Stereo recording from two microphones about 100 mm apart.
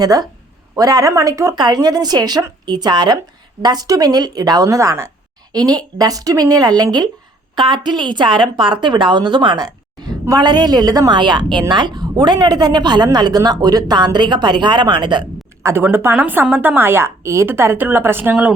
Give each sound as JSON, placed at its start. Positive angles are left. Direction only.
{"t": 0.0, "sound": "speech", "side_deg": -40}
{"t": 1.5, "sound": "a woman's voice", "side_deg": -45}
{"t": 5.5, "sound": "a woman's voice", "side_deg": -40}
{"t": 15.6, "sound": "a woman's voice", "side_deg": -20}